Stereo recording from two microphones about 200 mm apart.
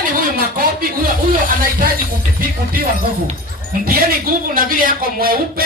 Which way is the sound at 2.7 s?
45° right (ahead or behind).